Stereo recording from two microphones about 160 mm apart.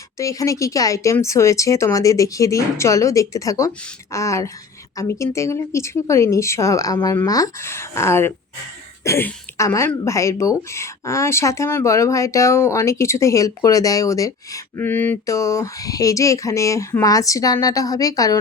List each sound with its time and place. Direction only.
0.2 s speech: 20° left (ahead or behind)